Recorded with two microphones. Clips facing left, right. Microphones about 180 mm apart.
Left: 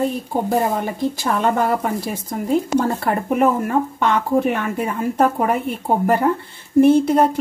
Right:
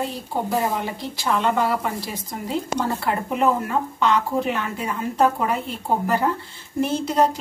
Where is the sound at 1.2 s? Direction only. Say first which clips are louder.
Left 1 dB; 45° left (ahead or behind).